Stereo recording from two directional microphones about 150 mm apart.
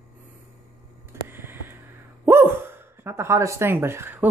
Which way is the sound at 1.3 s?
15° right (ahead or behind).